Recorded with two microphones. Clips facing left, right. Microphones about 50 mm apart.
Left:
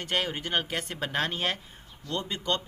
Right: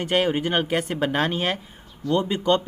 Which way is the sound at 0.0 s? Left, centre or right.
Centre.